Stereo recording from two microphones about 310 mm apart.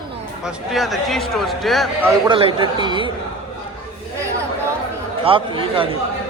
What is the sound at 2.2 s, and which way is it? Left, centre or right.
Speech, centre.